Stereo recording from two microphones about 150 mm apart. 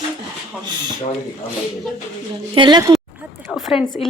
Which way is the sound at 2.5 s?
30° right (ahead or behind).